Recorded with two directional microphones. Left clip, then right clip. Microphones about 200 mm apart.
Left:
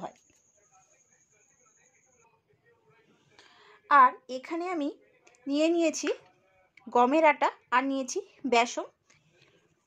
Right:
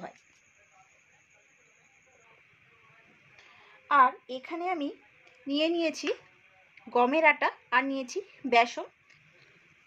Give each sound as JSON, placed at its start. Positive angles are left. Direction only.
{"t": 3.8, "sound": "speech", "side_deg": 45}